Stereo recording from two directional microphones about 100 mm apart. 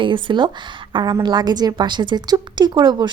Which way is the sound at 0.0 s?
55° right (ahead or behind).